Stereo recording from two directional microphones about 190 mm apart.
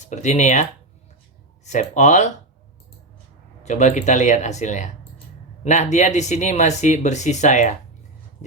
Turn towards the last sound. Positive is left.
turn(degrees=40)  # may be behind; listen again after turning